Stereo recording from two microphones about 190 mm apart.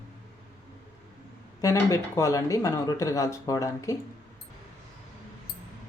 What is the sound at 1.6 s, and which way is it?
Speech, 15° left (ahead or behind).